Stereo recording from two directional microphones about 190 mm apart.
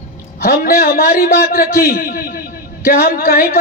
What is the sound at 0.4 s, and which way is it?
A man's voice, 50° left (ahead or behind).